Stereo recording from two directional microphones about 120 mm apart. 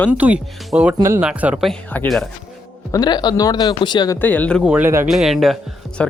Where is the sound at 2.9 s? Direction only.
35° left (ahead or behind).